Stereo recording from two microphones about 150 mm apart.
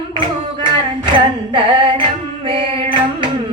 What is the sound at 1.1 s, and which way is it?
Music, 35° right (ahead or behind).